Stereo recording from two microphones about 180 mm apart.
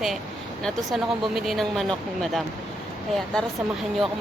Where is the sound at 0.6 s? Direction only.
Centre (ahead or behind).